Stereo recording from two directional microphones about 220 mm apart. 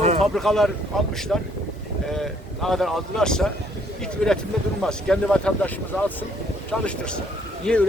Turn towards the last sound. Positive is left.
turn(degrees=5)  # may be behind; listen again after turning